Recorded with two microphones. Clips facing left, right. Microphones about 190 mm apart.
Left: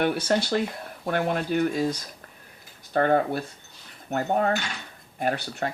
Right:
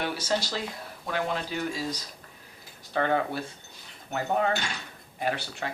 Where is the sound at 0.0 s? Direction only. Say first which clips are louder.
Left 6 dB; 55° left (ahead or behind).